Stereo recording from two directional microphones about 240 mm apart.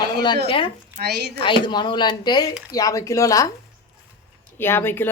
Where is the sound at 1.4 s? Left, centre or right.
Centre.